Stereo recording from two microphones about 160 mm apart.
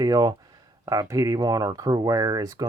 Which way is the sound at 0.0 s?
25° right (ahead or behind).